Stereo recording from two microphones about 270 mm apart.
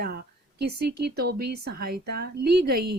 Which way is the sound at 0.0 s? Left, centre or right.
Right.